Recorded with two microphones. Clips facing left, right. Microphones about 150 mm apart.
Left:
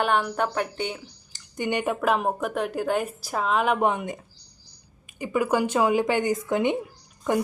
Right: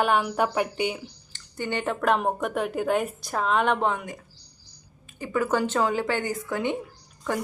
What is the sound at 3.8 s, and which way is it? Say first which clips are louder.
A woman's voice: left 3 dB; 20° left (ahead or behind).